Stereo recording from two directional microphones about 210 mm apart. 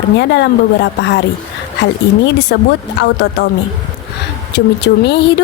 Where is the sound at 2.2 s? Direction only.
55° left (ahead or behind).